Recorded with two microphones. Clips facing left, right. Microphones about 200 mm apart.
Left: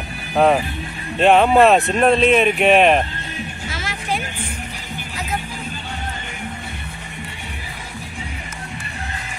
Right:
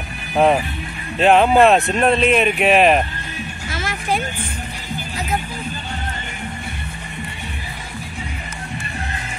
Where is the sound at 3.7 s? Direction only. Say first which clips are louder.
Right 3 dB; 50° right (ahead or behind).